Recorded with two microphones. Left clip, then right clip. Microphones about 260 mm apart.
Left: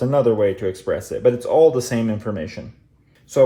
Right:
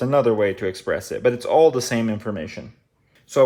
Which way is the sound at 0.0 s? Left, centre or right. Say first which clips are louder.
Left 1 dB; right.